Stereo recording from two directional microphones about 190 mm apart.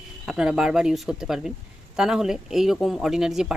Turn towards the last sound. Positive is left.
turn(degrees=0)  # may be behind; listen again after turning